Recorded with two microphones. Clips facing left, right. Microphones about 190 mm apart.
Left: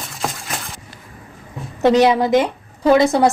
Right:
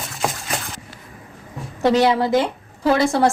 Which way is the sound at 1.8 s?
20° left (ahead or behind).